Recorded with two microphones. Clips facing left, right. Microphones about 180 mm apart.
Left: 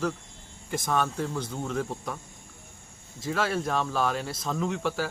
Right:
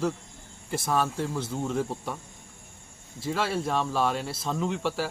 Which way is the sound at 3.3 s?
Centre (ahead or behind).